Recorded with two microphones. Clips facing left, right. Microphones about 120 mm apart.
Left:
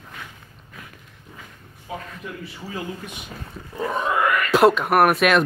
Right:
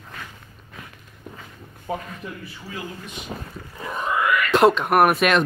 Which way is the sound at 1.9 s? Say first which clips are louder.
Right 4 dB; 40° right (ahead or behind).